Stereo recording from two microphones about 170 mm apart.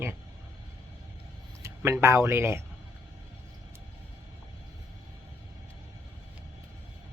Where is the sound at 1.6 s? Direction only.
15° right (ahead or behind).